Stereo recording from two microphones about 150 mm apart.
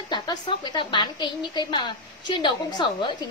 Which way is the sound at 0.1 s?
30° left (ahead or behind).